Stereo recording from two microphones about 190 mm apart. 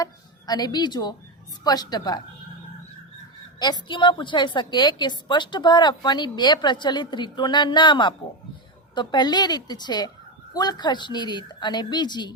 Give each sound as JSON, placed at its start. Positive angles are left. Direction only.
{"t": 0.0, "sound": "a woman's voice", "side_deg": 20}
{"t": 3.6, "sound": "a woman's voice", "side_deg": 25}